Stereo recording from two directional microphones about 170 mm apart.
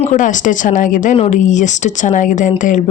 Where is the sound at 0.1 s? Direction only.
50° left (ahead or behind).